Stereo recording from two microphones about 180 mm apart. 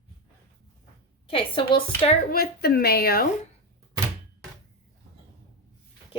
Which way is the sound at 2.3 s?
55° left (ahead or behind).